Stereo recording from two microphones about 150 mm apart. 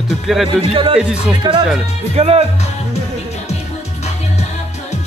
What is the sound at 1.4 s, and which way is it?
Speech, 25° right (ahead or behind).